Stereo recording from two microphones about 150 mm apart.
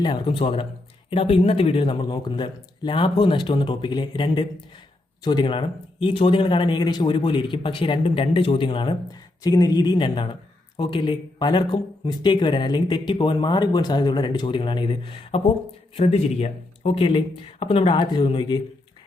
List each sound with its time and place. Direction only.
0.0 s speech: 35° left (ahead or behind)